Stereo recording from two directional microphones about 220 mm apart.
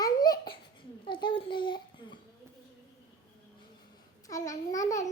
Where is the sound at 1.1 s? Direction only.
20° left (ahead or behind).